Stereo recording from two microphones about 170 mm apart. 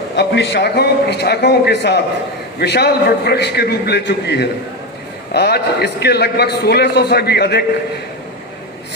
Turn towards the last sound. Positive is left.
turn(degrees=75)  # may be behind; listen again after turning